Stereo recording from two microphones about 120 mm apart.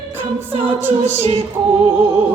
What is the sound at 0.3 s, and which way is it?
Music, 15° right (ahead or behind).